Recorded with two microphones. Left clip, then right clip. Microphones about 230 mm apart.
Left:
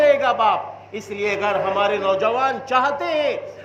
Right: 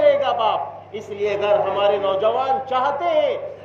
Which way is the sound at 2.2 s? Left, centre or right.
Left.